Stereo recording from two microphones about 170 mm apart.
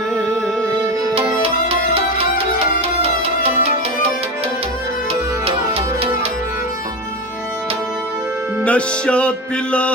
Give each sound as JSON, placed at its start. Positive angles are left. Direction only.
{"t": 5.5, "sound": "music", "side_deg": -35}
{"t": 8.6, "sound": "music", "side_deg": 5}